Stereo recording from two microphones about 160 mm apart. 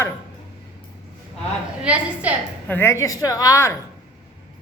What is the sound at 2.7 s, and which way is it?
A woman's voice, 15° left (ahead or behind).